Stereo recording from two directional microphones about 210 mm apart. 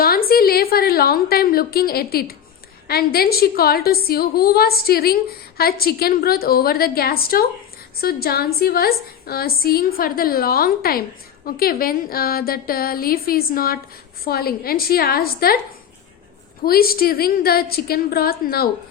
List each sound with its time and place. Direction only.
0.0 s a woman's voice: 45° left (ahead or behind)
16.6 s a woman's voice: 45° left (ahead or behind)